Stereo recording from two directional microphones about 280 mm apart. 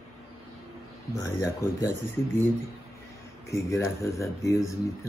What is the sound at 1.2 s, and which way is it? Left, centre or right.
Speech, centre.